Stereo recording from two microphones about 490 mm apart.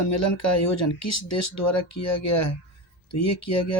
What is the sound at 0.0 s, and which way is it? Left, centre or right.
Speech, left.